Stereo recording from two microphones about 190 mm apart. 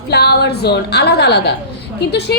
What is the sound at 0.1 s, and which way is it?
A woman's voice, 60° left (ahead or behind).